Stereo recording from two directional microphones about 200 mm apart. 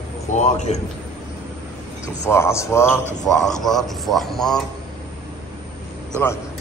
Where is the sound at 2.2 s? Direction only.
15° left (ahead or behind).